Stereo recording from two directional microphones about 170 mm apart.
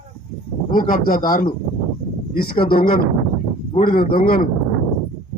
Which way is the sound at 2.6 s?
60° left (ahead or behind).